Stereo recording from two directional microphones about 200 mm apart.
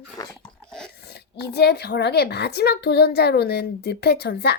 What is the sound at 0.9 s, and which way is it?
Speech, 55° left (ahead or behind).